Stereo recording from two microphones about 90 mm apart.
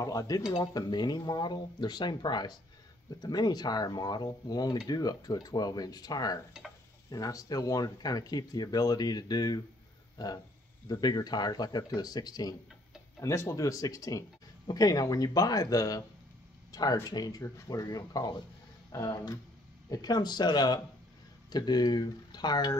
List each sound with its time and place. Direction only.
0.0 s speech: 40° left (ahead or behind)
0.7 s speech: 50° left (ahead or behind)
13.2 s speech: 30° left (ahead or behind)
17.0 s speech: 45° left (ahead or behind)